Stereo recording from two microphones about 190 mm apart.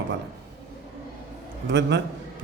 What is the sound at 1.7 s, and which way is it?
Speech, 65° right (ahead or behind).